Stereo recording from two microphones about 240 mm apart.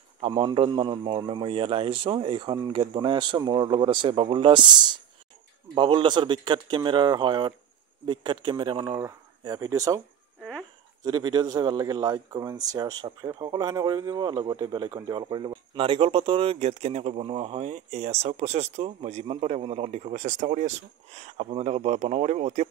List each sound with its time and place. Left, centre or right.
0.2 s a man's voice: centre
11.1 s a man's voice: centre